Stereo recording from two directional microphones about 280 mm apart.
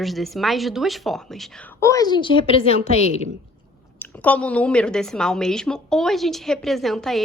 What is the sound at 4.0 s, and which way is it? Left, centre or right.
A woman's voice, centre.